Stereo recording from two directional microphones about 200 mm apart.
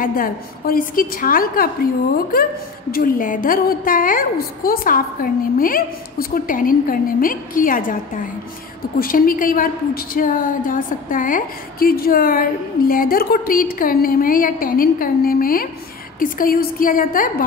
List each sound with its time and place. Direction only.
0.0 s a woman's voice: 45° left (ahead or behind)